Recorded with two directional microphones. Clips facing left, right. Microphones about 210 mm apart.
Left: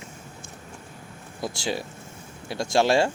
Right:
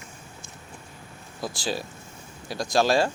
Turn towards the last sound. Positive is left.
turn(degrees=25)  # may be behind; listen again after turning